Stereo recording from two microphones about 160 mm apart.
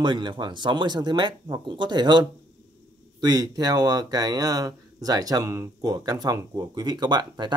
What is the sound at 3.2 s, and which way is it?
Speech, 25° right (ahead or behind).